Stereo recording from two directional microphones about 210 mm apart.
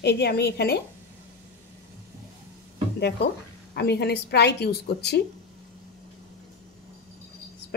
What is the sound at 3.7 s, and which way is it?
A woman's voice, 50° left (ahead or behind).